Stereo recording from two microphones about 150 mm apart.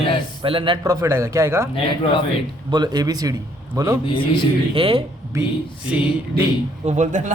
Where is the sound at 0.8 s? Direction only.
20° right (ahead or behind).